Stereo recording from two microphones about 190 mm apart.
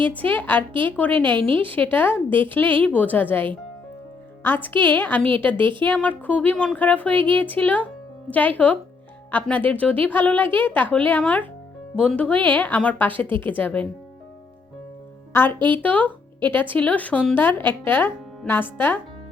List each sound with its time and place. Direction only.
0.1 s speech: 10° left (ahead or behind)
1.4 s a woman's voice: 25° right (ahead or behind)
1.7 s speech: 10° left (ahead or behind)
5.5 s a woman's voice: 25° right (ahead or behind)
5.8 s speech: 10° left (ahead or behind)
15.3 s speech: 10° left (ahead or behind)